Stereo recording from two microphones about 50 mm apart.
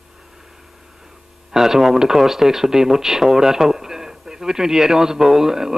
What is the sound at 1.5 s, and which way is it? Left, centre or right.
Speech, centre.